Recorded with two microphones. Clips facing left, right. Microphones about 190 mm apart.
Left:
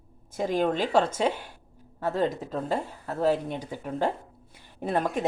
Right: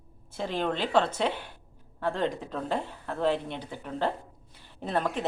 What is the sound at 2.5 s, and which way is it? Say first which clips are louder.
A woman's voice: left 2 dB; 10° left (ahead or behind).